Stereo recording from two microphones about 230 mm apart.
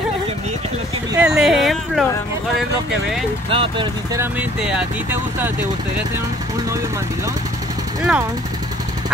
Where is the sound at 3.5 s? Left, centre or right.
Right.